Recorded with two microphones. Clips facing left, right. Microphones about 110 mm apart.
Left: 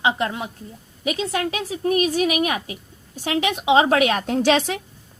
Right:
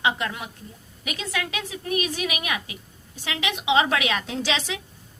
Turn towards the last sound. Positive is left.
turn(degrees=50)  # may be behind; listen again after turning